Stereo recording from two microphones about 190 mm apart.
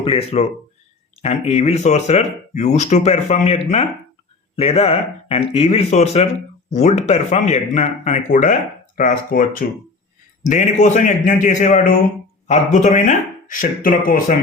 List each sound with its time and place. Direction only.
0.0 s speech: 30° left (ahead or behind); by 14.3 s 45° left (ahead or behind)